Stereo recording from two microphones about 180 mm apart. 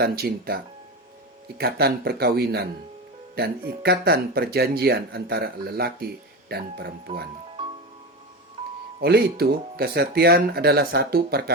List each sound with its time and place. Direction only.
0.0 s speech: 60° right (ahead or behind)
7.6 s music: 25° right (ahead or behind)
9.0 s speech: 60° right (ahead or behind)